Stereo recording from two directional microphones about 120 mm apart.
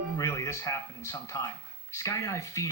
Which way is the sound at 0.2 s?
25° left (ahead or behind).